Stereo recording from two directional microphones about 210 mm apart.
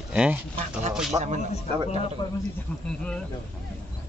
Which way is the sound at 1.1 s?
15° right (ahead or behind).